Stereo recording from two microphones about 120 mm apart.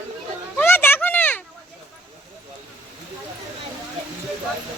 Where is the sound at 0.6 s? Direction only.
20° left (ahead or behind).